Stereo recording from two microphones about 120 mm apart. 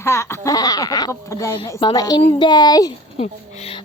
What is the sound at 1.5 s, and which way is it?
A woman's voice, 30° left (ahead or behind).